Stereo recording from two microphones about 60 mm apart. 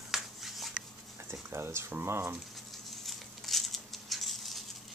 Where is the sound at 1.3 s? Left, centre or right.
Right.